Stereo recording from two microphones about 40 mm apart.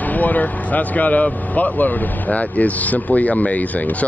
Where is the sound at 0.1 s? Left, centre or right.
Left.